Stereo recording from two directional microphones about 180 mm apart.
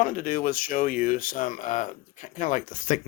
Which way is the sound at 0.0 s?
50° left (ahead or behind).